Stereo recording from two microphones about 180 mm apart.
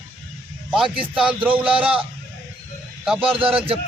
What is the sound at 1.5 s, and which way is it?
Speech, 10° right (ahead or behind).